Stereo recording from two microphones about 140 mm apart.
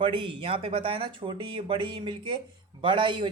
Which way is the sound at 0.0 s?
40° right (ahead or behind).